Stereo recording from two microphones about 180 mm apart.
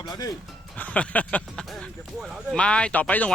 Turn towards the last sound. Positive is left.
turn(degrees=10)  # may be behind; listen again after turning